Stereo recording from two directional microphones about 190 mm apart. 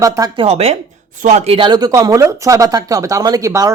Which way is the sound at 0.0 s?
20° right (ahead or behind).